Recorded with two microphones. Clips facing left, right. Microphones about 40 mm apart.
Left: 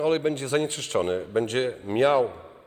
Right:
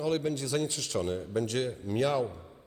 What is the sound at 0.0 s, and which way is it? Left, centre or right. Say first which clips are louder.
A man's voice: left 6 dB; left.